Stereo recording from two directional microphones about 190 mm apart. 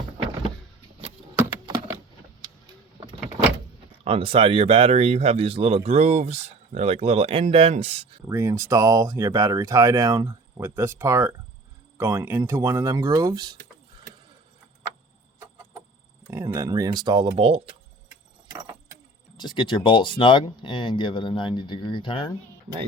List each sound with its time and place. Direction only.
4.0 s speech: 30° right (ahead or behind)
8.3 s speech: 15° right (ahead or behind)
16.2 s speech: 15° right (ahead or behind); by 17.7 s 30° right (ahead or behind)
19.4 s speech: 25° left (ahead or behind)